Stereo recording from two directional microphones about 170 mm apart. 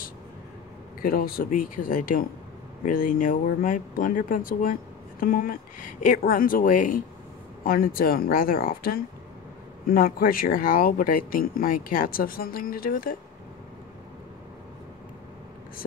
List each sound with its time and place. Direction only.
1.0 s speech: 60° left (ahead or behind)